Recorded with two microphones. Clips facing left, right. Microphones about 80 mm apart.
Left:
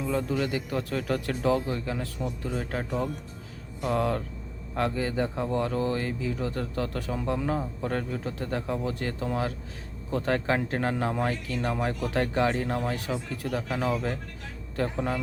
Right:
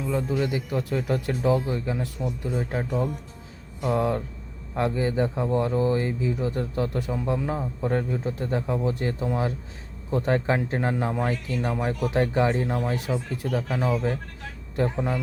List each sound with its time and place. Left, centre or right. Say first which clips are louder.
0.0 s speech: right 2 dB; centre
12.6 s speech: right 2 dB; centre
13.1 s speech: right 3 dB; centre